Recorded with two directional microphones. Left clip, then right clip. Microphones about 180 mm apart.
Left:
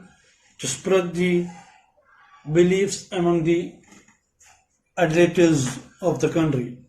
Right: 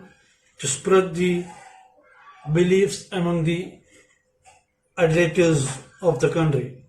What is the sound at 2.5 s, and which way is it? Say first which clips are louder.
Speech: even; 40° left (ahead or behind).